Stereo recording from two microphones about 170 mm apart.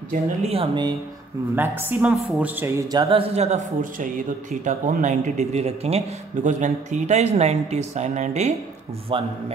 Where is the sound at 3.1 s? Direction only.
35° right (ahead or behind).